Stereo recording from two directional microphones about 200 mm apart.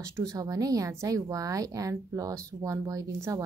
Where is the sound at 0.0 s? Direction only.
15° right (ahead or behind).